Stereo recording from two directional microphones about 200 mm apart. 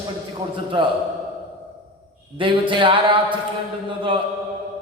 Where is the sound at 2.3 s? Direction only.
25° right (ahead or behind).